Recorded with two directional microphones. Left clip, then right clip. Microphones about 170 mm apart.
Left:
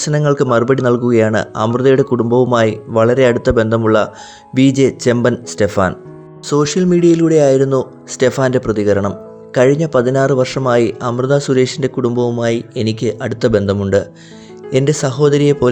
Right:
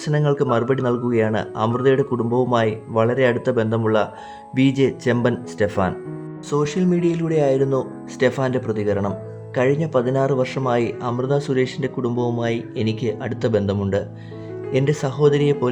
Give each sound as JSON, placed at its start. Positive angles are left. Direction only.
{"t": 0.0, "sound": "speech", "side_deg": 30}